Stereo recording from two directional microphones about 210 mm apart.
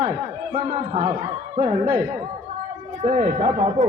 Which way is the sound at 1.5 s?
30° right (ahead or behind).